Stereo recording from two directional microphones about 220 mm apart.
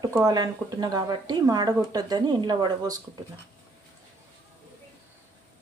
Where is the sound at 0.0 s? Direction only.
15° right (ahead or behind).